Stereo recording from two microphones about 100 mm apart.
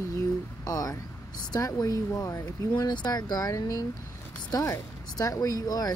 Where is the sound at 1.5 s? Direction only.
35° left (ahead or behind).